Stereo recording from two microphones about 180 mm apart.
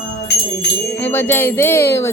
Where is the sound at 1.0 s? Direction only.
10° left (ahead or behind).